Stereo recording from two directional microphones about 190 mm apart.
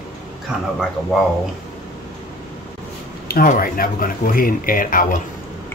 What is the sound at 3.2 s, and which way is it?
Speech, 50° left (ahead or behind).